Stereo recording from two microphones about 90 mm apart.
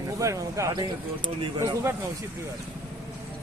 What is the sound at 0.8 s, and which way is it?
Speech, 60° right (ahead or behind).